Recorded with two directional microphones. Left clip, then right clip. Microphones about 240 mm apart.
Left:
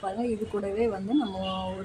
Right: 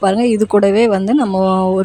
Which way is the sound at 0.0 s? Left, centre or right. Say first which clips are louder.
Right 17 dB; right.